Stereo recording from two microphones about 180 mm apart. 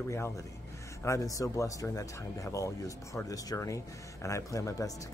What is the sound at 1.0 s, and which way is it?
Speech, 15° left (ahead or behind).